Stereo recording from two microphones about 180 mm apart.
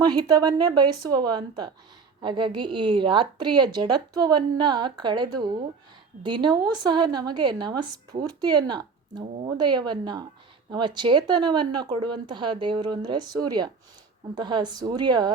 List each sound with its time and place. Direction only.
0.0 s a woman's voice: 20° right (ahead or behind)